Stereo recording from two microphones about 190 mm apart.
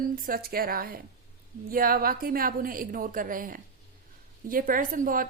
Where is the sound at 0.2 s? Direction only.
50° right (ahead or behind).